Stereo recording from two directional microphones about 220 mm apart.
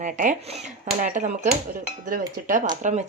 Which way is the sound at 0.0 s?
35° right (ahead or behind).